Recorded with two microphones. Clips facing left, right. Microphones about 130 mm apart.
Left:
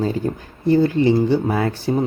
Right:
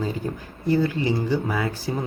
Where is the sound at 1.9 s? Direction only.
40° left (ahead or behind).